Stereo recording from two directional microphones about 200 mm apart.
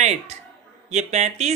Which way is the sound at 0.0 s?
35° right (ahead or behind).